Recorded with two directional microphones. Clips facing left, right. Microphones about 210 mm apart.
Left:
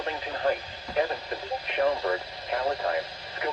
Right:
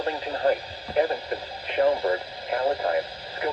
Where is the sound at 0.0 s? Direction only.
35° right (ahead or behind).